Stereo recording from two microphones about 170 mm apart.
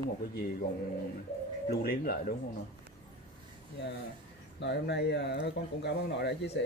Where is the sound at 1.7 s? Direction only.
65° left (ahead or behind).